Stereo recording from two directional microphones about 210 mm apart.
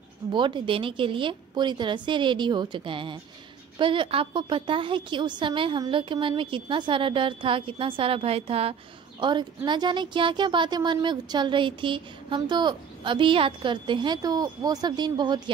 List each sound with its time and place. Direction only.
0.3 s speech: 20° right (ahead or behind)